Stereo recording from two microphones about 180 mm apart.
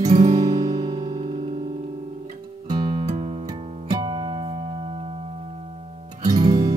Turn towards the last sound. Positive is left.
turn(degrees=-25)  # may be behind; listen again after turning